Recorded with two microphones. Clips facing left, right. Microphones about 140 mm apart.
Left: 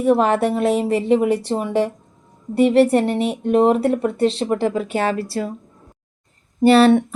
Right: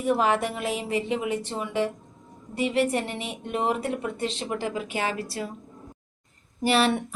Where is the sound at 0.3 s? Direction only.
35° left (ahead or behind).